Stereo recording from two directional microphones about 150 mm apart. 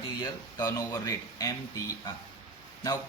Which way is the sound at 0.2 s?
25° left (ahead or behind).